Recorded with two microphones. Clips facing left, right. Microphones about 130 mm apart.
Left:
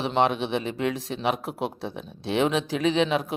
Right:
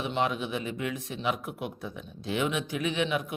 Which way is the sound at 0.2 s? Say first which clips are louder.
Left 7 dB; 80° left.